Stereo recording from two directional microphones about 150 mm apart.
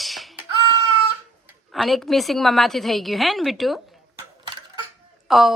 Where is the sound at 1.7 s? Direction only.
Centre (ahead or behind).